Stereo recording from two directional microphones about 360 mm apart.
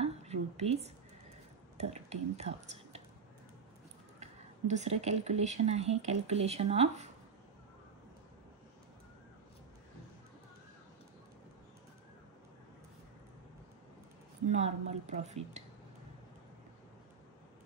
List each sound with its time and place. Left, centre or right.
0.0 s whispering: centre
1.8 s speech: centre
4.2 s speech: centre
14.5 s speech: centre